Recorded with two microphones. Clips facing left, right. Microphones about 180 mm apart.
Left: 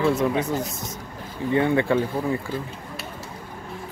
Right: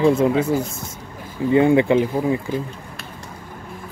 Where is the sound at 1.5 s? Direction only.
25° right (ahead or behind).